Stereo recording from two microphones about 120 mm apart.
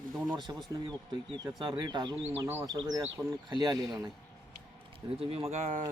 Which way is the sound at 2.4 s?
20° right (ahead or behind).